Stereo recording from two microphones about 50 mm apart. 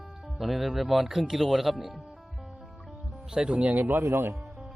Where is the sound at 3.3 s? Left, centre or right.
Centre; by 4.0 s right.